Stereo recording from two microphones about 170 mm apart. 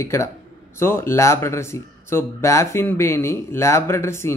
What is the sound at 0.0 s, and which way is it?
Speech, 15° left (ahead or behind).